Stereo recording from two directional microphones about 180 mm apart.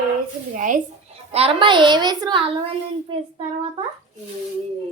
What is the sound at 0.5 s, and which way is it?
Speech, 45° right (ahead or behind).